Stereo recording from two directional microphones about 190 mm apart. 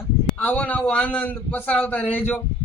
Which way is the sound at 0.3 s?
10° left (ahead or behind).